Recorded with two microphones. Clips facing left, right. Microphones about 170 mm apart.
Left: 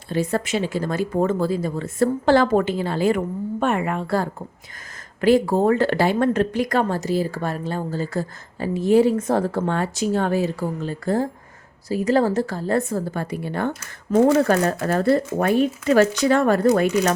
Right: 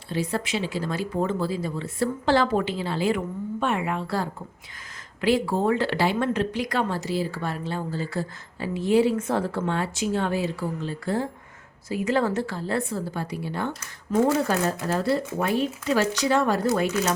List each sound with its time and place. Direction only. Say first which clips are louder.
0.1 s speech: left 5 dB; 50° left (ahead or behind)
14.4 s speech: left 5 dB; 60° left (ahead or behind)